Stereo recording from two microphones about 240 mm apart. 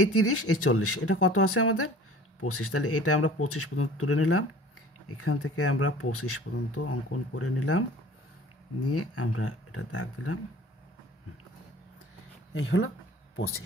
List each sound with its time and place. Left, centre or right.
0.0 s speech: left
8.8 s speech: left
12.5 s speech: left